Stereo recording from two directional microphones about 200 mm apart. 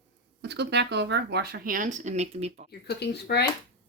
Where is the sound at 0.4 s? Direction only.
60° right (ahead or behind); by 2.6 s 30° right (ahead or behind).